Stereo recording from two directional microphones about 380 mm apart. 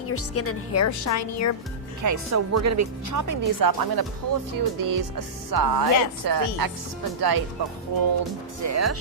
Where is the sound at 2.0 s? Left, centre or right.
Right.